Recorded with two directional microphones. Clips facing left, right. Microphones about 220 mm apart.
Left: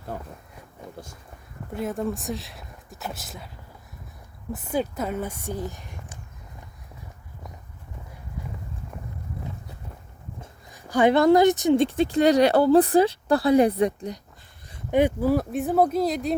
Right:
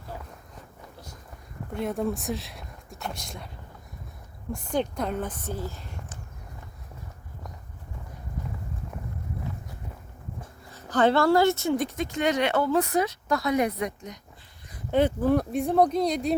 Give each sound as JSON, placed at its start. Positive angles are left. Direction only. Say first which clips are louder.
{"t": 0.1, "sound": "speech", "louder": "left 5 dB", "side_deg": 55}
{"t": 1.7, "sound": "speech", "louder": "even", "side_deg": 0}
{"t": 4.5, "sound": "speech", "louder": "left 1 dB", "side_deg": 5}
{"t": 10.4, "sound": "speech", "louder": "right 1 dB", "side_deg": 15}
{"t": 14.8, "sound": "speech", "louder": "left 2 dB", "side_deg": 15}